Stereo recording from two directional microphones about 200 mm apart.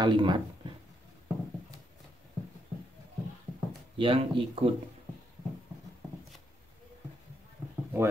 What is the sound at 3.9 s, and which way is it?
Speech, 25° right (ahead or behind).